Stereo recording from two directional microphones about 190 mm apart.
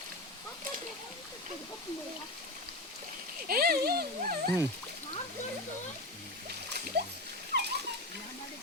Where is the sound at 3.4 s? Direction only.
50° right (ahead or behind).